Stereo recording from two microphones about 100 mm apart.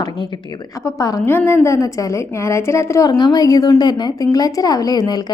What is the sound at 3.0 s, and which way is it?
A woman's voice, 40° left (ahead or behind).